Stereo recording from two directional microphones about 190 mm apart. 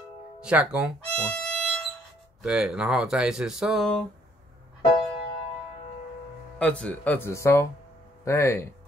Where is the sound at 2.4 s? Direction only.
5° right (ahead or behind).